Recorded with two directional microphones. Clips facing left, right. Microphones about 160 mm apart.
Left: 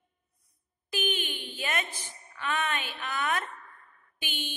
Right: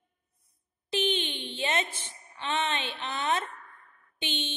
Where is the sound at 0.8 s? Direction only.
25° right (ahead or behind).